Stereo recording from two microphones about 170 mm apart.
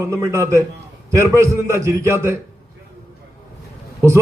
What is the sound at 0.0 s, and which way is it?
A man's voice, 15° right (ahead or behind).